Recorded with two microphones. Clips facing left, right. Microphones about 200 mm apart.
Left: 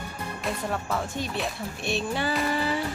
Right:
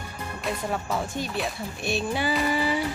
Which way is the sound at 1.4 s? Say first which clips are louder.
Right 1 dB; centre (ahead or behind).